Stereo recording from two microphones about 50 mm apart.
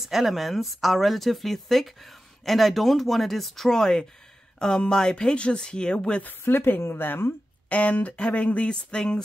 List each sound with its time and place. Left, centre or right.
0.0 s speech: centre
6.4 s speech: left
7.7 s speech: left